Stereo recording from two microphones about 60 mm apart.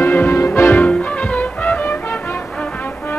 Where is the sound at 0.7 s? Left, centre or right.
Left.